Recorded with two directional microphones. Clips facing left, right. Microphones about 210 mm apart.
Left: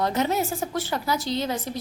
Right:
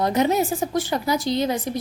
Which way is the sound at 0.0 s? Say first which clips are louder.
Right 4 dB; 15° right (ahead or behind).